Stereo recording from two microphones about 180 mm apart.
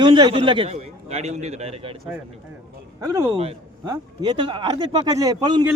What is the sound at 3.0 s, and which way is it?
Speech, 20° right (ahead or behind).